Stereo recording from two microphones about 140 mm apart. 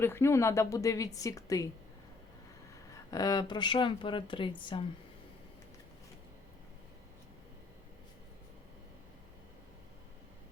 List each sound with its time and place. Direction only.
0.0 s a woman's voice: 15° left (ahead or behind)
2.9 s speech: 25° left (ahead or behind)